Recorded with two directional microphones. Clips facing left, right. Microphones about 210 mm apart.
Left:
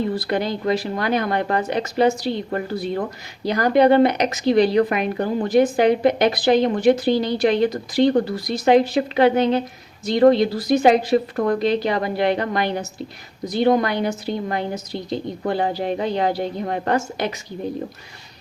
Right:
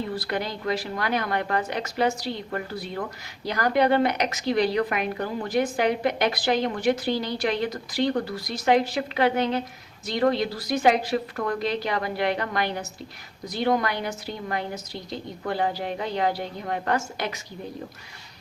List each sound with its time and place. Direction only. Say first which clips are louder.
0.2 s speech: left 6 dB; 25° left (ahead or behind)